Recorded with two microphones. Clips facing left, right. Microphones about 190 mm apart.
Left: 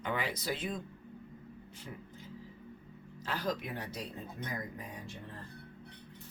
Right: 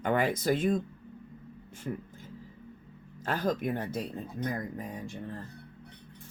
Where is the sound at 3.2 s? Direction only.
50° right (ahead or behind).